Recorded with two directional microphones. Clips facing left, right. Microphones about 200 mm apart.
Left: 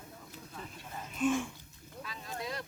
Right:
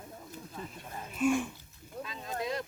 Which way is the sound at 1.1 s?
10° right (ahead or behind).